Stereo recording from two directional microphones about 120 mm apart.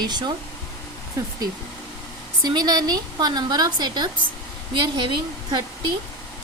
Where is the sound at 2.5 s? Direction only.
35° right (ahead or behind).